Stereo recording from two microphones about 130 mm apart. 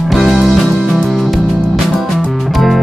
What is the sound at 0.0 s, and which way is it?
Music, centre (ahead or behind).